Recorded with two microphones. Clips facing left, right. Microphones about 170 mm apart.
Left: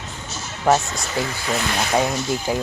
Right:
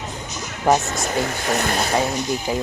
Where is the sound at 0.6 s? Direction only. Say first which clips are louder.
Even; 15° right (ahead or behind).